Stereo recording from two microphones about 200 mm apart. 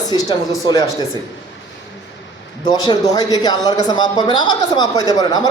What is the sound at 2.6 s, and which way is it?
Speech, 20° left (ahead or behind).